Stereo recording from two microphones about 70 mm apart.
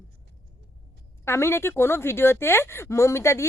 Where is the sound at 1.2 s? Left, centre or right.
Left.